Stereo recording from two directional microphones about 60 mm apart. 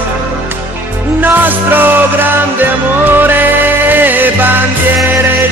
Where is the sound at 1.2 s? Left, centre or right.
Right.